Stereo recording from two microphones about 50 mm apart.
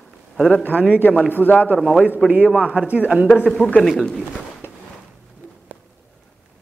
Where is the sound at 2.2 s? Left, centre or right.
Right.